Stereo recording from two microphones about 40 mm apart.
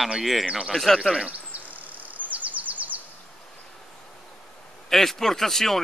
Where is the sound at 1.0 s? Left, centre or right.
Centre.